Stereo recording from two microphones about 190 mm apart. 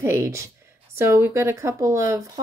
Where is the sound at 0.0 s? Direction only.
15° right (ahead or behind).